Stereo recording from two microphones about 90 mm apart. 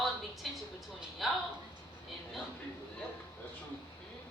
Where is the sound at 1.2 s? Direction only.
Centre (ahead or behind).